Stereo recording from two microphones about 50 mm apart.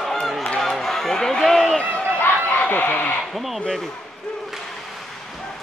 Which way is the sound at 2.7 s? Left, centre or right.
Left.